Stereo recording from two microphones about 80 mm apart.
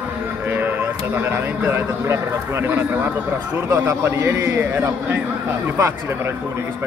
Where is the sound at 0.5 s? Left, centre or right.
Right.